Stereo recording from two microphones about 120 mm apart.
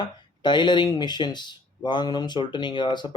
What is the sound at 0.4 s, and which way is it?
Speech, 40° left (ahead or behind).